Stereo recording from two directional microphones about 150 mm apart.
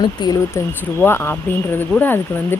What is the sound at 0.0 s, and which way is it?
Speech, 30° left (ahead or behind).